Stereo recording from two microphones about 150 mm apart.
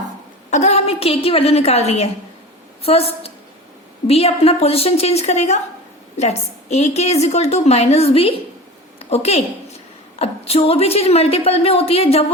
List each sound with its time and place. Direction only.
0.5 s a woman's voice: 45° left (ahead or behind)
9.0 s a sound: 45° left (ahead or behind)
10.2 s a woman's voice: 40° left (ahead or behind)